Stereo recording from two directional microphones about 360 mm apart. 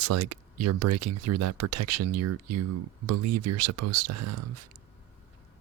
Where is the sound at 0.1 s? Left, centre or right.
Right.